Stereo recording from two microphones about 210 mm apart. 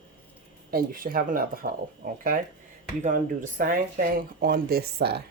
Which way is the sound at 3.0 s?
40° right (ahead or behind).